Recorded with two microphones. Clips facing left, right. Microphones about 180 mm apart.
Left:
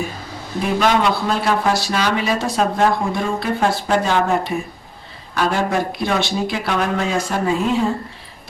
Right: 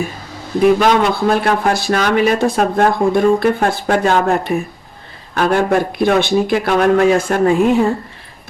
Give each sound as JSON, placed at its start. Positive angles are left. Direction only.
{"t": 0.6, "sound": "speech", "side_deg": -50}